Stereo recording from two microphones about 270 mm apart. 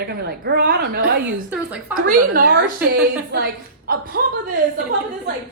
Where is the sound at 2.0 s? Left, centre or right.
Right.